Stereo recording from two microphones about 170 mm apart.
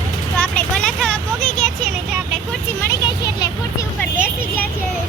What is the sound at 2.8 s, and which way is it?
Vehicle, 20° left (ahead or behind).